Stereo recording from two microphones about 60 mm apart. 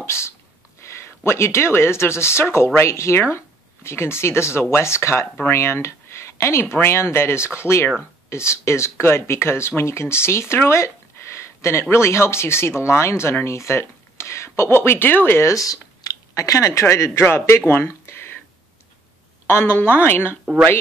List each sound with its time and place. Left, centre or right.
0.0 s a woman's voice: left
15.5 s a sound: left
16.8 s a man's voice: left
17.2 s speech: left
19.4 s a woman's voice: left